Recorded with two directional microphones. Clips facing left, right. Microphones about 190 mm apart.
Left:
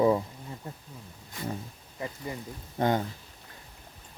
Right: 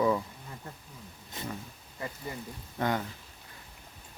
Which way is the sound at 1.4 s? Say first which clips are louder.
Left 3 dB; 20° right (ahead or behind).